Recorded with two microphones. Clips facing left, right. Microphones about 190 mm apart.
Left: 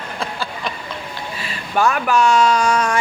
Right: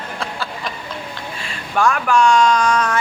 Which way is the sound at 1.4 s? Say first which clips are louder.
Even; 5° left (ahead or behind).